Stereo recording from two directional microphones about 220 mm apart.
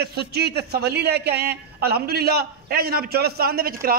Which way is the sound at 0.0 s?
45° right (ahead or behind).